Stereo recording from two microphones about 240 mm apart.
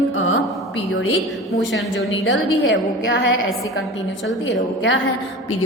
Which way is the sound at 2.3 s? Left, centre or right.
Left.